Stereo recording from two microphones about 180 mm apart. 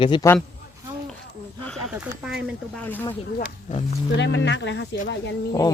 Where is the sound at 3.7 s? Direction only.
45° left (ahead or behind).